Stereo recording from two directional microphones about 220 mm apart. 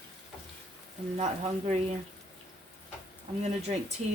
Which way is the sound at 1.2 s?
30° right (ahead or behind).